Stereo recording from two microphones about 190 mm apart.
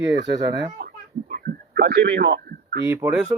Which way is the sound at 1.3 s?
50° right (ahead or behind).